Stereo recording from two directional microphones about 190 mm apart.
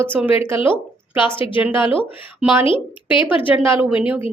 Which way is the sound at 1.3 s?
25° left (ahead or behind).